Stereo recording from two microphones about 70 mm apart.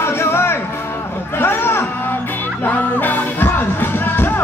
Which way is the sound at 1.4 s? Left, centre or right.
Left.